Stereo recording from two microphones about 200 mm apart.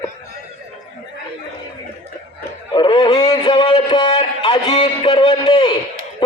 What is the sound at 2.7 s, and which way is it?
Music, 20° left (ahead or behind).